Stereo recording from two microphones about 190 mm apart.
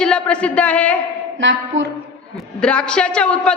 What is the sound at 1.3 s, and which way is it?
Speech, 85° right.